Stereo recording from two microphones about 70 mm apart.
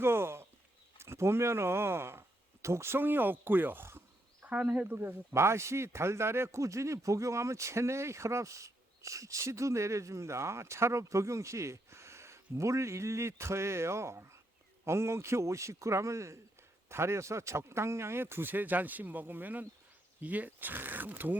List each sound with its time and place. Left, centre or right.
0.0 s a sound: right
0.9 s speech: right
4.4 s a man's voice: centre